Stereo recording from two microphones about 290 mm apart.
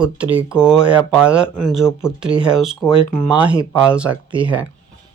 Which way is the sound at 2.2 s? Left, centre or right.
Centre.